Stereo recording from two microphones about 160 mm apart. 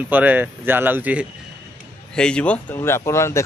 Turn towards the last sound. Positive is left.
turn(degrees=15)  # may be behind; listen again after turning